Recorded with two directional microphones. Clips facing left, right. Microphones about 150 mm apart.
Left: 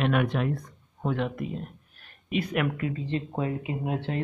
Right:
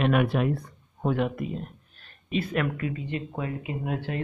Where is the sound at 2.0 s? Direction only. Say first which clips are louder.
Even; 15° left (ahead or behind).